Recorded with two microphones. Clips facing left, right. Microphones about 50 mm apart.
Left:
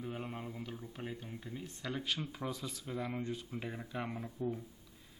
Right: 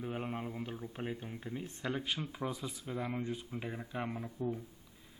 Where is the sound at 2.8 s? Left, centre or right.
Centre.